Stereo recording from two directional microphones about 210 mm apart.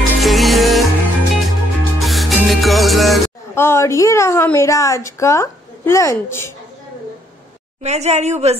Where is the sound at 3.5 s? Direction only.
10° left (ahead or behind).